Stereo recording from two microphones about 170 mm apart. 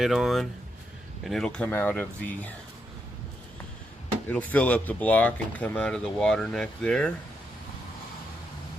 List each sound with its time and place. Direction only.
0.0 s speech: centre (ahead or behind)
4.3 s speech: 10° left (ahead or behind)